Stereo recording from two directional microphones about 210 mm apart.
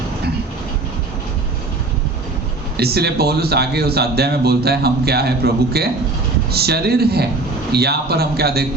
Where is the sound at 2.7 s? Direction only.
50° right (ahead or behind).